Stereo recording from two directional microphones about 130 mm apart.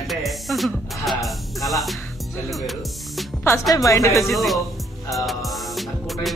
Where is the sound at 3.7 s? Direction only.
25° left (ahead or behind).